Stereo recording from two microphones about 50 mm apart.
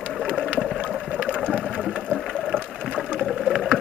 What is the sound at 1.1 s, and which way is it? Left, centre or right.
Sewing machine, centre.